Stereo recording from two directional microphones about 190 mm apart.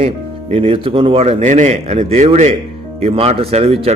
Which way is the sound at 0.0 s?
30° right (ahead or behind).